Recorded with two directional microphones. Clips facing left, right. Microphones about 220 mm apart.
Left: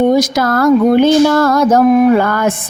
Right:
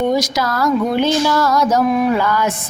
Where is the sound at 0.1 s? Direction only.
50° left (ahead or behind).